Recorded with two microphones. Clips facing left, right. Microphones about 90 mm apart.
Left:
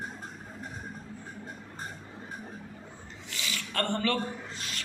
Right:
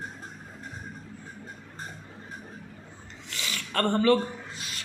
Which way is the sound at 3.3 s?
45° right (ahead or behind).